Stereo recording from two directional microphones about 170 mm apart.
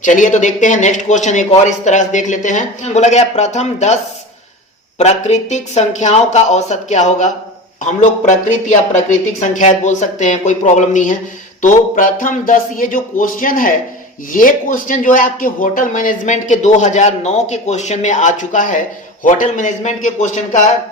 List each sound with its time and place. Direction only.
0.0 s speech: 45° left (ahead or behind)
4.9 s speech: 40° left (ahead or behind)